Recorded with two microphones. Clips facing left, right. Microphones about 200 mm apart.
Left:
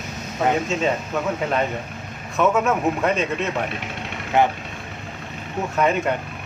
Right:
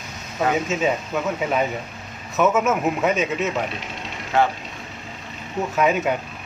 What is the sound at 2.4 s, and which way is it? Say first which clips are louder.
Speech: even; 5° right (ahead or behind).